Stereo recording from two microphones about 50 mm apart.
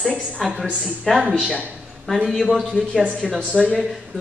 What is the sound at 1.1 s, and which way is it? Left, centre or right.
Speech, centre.